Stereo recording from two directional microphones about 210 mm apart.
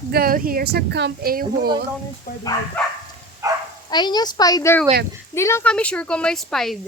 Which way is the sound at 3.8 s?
20° left (ahead or behind).